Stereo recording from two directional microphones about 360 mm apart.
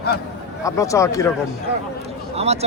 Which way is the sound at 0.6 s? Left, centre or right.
Centre.